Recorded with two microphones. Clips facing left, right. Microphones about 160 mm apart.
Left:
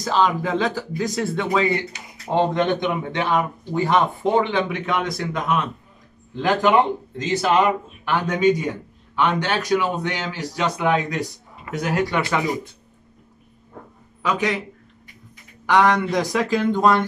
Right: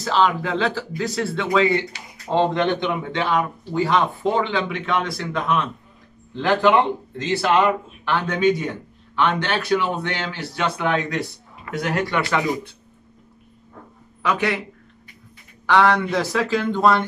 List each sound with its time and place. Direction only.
0.0 s speech: 15° left (ahead or behind)
14.2 s speech: 15° left (ahead or behind)
15.6 s speech: 15° left (ahead or behind)